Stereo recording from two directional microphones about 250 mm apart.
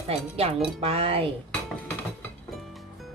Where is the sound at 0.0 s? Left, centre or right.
Right.